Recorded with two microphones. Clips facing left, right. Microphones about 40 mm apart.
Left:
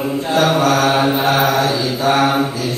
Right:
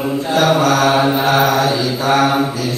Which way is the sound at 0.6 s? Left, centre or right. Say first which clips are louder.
Right 1 dB; left.